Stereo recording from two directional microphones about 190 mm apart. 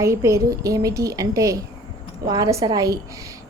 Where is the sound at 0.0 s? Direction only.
15° right (ahead or behind).